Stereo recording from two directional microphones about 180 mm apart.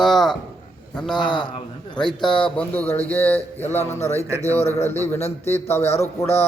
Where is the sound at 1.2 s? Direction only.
25° left (ahead or behind).